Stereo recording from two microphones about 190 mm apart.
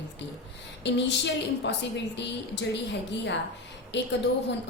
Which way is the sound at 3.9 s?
65° left (ahead or behind).